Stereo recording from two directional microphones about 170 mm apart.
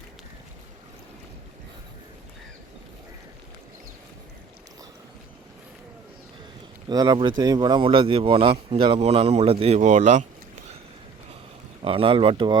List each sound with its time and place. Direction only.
6.8 s speech: 25° right (ahead or behind); by 10.8 s 40° right (ahead or behind)
11.8 s speech: 30° right (ahead or behind)